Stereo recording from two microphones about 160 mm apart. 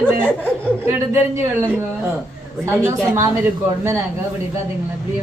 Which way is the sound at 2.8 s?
15° right (ahead or behind).